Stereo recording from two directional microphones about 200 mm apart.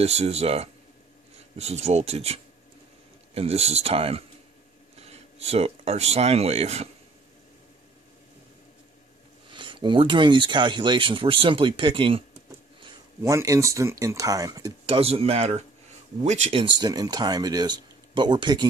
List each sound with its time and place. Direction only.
0.0 s speech: 30° right (ahead or behind)
9.5 s speech: 25° right (ahead or behind)
12.8 s speech: 15° right (ahead or behind)
15.0 s speech: 30° right (ahead or behind)